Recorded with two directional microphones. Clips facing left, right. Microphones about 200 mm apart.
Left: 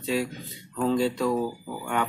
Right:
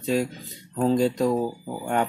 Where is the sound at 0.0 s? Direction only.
45° right (ahead or behind).